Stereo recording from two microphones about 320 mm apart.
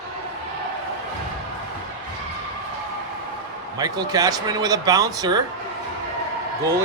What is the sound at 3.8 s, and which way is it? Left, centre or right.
Speech, centre.